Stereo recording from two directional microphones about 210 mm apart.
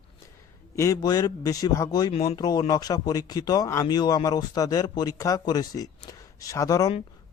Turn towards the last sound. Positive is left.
turn(degrees=15)  # may be behind; listen again after turning